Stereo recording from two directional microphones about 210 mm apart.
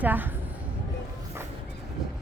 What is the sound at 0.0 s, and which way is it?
Speech, 10° right (ahead or behind).